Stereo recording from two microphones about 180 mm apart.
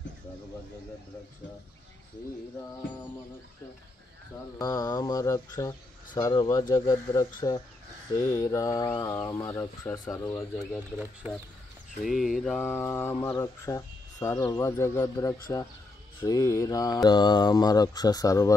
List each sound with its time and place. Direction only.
4.6 s mantra: 20° left (ahead or behind)
12.0 s speech: centre (ahead or behind); by 15.3 s 15° left (ahead or behind)
16.2 s mantra: 15° left (ahead or behind)